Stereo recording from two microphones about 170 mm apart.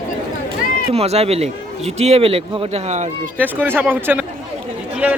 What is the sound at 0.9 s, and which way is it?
Speech, 35° right (ahead or behind).